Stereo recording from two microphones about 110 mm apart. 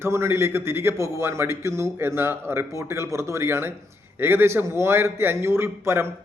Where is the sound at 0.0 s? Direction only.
25° right (ahead or behind).